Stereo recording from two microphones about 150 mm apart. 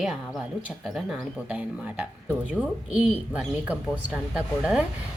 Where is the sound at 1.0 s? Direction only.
Centre (ahead or behind).